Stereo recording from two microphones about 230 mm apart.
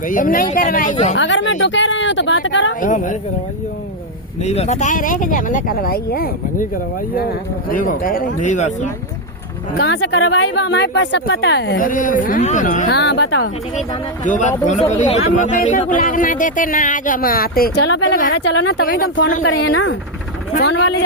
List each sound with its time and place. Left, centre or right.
0.1 s speech: left
1.1 s speech: left
2.8 s speech: left
4.4 s speech: left
7.7 s speech: left
9.7 s speech: left
11.9 s speech: left
12.9 s speech: left
14.3 s speech: left